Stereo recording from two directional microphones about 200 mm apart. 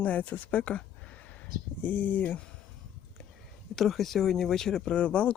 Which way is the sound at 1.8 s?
10° left (ahead or behind).